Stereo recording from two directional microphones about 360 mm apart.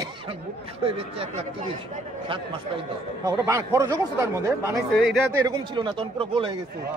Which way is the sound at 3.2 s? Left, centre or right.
Centre.